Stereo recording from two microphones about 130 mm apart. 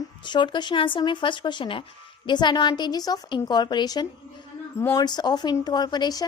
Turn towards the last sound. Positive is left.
turn(degrees=30)  # may be behind; listen again after turning